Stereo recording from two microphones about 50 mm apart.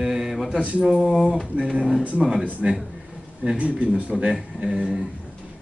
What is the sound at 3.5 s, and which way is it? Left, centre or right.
Speech, right.